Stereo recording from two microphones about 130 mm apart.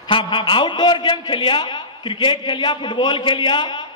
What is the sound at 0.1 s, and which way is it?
A man's voice, 40° left (ahead or behind).